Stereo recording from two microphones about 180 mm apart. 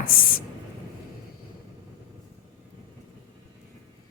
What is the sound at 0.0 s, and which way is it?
Speech, 50° left (ahead or behind).